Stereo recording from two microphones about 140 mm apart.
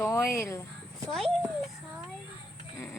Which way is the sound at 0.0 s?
20° left (ahead or behind).